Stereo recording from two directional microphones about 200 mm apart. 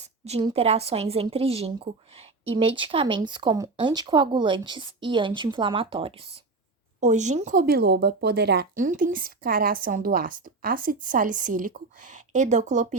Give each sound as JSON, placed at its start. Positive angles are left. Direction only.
{"t": 0.0, "sound": "a woman's voice", "side_deg": -30}